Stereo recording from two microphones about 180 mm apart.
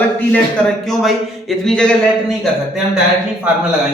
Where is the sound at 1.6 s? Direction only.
5° left (ahead or behind).